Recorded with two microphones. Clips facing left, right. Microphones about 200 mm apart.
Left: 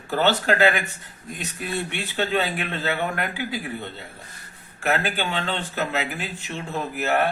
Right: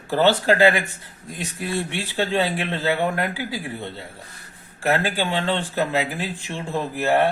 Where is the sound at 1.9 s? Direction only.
30° right (ahead or behind).